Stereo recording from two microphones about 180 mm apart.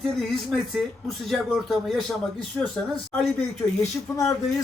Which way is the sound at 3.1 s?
10° left (ahead or behind).